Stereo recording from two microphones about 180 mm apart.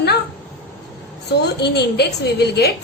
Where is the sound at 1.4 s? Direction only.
65° left (ahead or behind).